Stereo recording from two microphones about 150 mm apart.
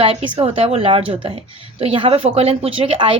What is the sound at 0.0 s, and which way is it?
Speech, 40° right (ahead or behind).